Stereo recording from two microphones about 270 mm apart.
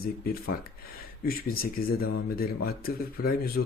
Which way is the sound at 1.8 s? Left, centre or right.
Left.